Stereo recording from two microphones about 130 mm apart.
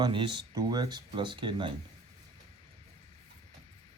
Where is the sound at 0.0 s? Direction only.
40° right (ahead or behind).